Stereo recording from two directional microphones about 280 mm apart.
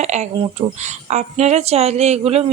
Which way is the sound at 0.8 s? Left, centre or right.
Right.